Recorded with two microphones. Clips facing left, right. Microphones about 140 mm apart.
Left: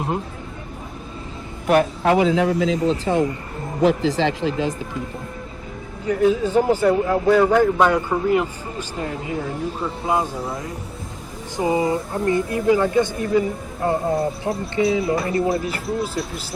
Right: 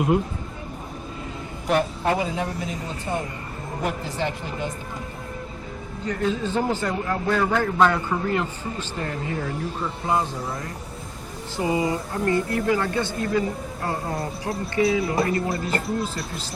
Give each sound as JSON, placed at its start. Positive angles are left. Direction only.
{"t": 1.6, "sound": "speech", "side_deg": 70}
{"t": 6.1, "sound": "a man's voice", "side_deg": 10}
{"t": 11.5, "sound": "speech", "side_deg": 25}
{"t": 15.4, "sound": "speech", "side_deg": 0}